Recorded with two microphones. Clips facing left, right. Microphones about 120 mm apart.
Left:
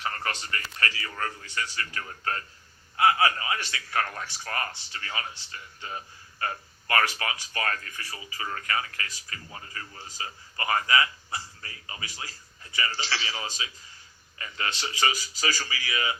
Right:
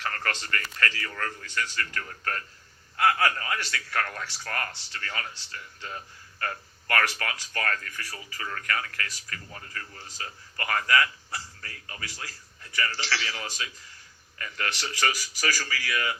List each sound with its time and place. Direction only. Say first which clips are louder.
0.0 s a man's voice: even; 20° left (ahead or behind)